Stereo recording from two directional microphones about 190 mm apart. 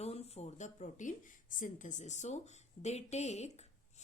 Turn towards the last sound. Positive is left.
turn(degrees=35)  # may be behind; listen again after turning